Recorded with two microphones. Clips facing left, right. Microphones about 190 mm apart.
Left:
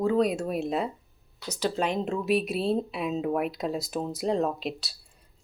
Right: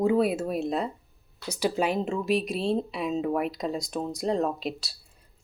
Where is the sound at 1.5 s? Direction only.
10° right (ahead or behind).